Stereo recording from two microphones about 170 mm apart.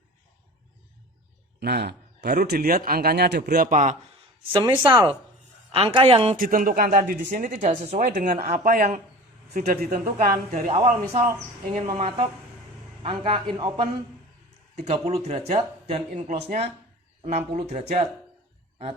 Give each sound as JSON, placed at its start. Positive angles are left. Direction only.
{"t": 1.5, "sound": "speech", "side_deg": -75}
{"t": 4.5, "sound": "speech", "side_deg": -25}
{"t": 6.3, "sound": "speech", "side_deg": -55}
{"t": 14.8, "sound": "speech", "side_deg": -40}